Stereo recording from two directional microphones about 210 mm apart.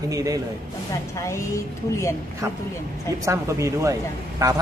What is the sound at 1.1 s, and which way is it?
A woman's voice, 15° left (ahead or behind).